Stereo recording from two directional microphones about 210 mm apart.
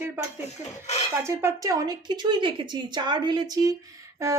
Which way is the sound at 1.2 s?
15° right (ahead or behind).